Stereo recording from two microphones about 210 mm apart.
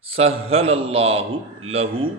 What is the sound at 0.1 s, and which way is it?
A man's voice, 30° right (ahead or behind).